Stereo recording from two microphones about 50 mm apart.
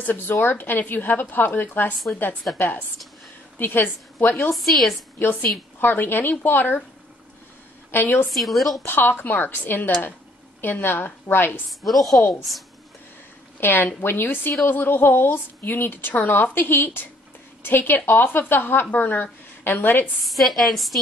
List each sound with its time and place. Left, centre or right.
0.0 s a woman's voice: left
3.5 s a woman's voice: left
4.6 s speech: centre
5.8 s a woman's voice: left
7.9 s a woman's voice: left
8.3 s speech: centre
8.8 s a woman's voice: left
11.8 s speech: centre
13.6 s a woman's voice: left
20.2 s speech: centre